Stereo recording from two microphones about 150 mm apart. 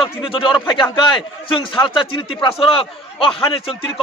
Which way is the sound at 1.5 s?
35° left (ahead or behind).